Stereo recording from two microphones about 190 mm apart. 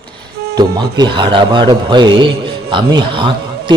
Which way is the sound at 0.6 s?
20° right (ahead or behind).